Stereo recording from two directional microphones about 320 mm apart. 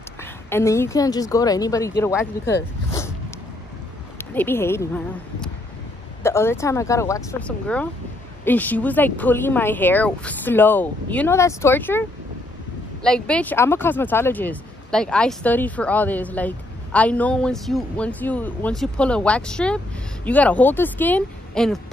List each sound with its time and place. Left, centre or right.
0.2 s speech: centre
2.9 s dog: centre
4.2 s speech: centre